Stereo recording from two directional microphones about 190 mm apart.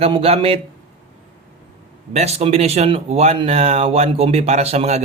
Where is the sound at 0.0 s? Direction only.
30° right (ahead or behind).